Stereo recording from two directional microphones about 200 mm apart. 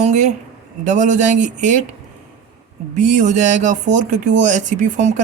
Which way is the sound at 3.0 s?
35° right (ahead or behind).